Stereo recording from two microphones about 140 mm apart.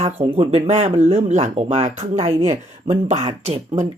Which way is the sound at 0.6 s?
55° right (ahead or behind).